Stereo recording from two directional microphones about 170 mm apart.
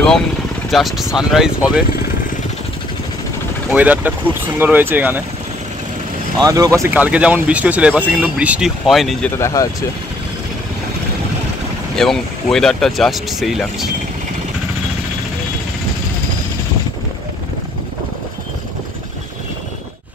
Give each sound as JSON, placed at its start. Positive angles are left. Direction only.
{"t": 0.7, "sound": "speech", "side_deg": 0}
{"t": 3.7, "sound": "speech", "side_deg": -10}
{"t": 6.4, "sound": "speech", "side_deg": -20}
{"t": 9.4, "sound": "speech", "side_deg": 20}
{"t": 11.9, "sound": "speech", "side_deg": 5}